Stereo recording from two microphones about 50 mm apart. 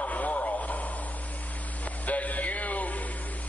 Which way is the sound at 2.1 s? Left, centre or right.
Left.